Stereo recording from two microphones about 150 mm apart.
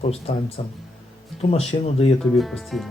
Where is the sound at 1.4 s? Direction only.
40° left (ahead or behind).